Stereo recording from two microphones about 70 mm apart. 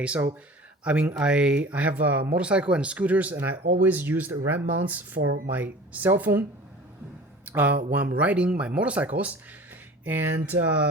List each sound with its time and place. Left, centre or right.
0.9 s speech: centre
7.4 s speech: right